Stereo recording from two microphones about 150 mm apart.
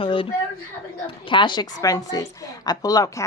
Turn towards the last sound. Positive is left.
turn(degrees=25)  # may be behind; listen again after turning